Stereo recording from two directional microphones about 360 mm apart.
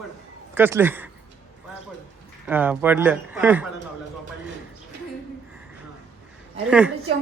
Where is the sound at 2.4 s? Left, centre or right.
Centre.